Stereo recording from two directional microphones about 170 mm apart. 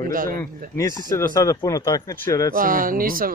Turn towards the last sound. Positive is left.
turn(degrees=-55)  # may be behind; listen again after turning